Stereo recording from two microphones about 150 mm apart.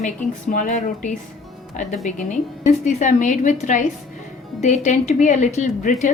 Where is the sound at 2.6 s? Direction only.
55° left (ahead or behind).